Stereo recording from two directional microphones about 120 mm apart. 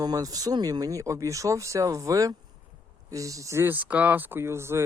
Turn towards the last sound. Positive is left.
turn(degrees=-20)  # may be behind; listen again after turning